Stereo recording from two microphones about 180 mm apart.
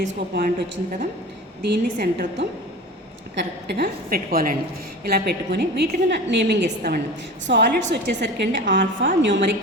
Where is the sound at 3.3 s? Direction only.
70° right (ahead or behind); by 9.1 s 90° right.